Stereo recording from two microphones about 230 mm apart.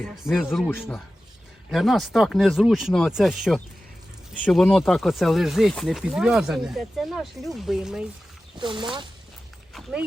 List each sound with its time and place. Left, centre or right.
0.0 s speech: centre
1.7 s speech: centre
8.5 s speech: right